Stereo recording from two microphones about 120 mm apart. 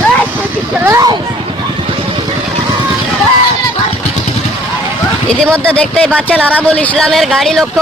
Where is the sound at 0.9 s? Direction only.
30° right (ahead or behind).